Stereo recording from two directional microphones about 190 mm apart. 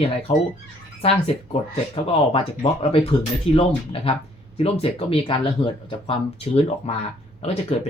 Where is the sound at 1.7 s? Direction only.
30° left (ahead or behind).